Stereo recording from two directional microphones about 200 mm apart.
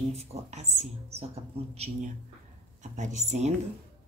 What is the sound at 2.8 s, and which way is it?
Speech, 35° right (ahead or behind).